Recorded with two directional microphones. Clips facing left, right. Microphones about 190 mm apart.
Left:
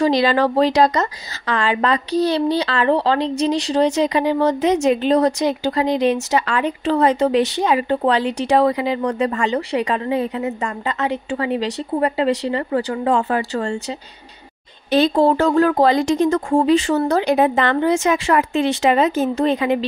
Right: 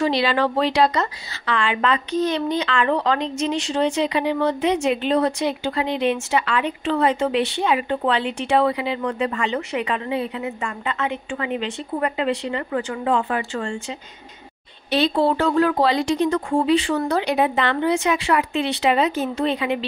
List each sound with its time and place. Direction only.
0.0 s a woman's voice: 40° left (ahead or behind)
14.9 s speech: 45° left (ahead or behind)